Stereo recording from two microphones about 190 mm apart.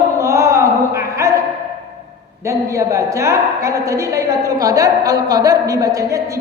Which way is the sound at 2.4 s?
15° right (ahead or behind).